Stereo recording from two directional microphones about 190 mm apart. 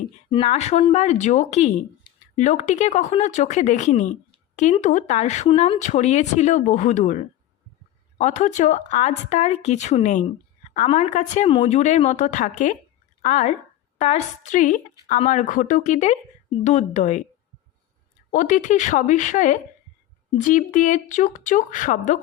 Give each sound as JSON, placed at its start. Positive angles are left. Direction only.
{"t": 0.3, "sound": "speech", "side_deg": 30}
{"t": 18.3, "sound": "speech", "side_deg": 40}